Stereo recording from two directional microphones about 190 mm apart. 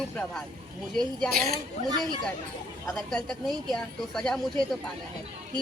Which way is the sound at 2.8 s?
Centre (ahead or behind).